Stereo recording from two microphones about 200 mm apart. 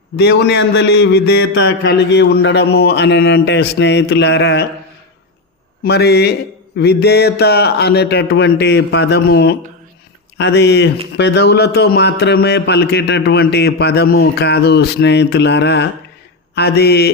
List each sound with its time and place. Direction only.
0.2 s a man's voice: 55° left (ahead or behind)
5.8 s a man's voice: 55° left (ahead or behind)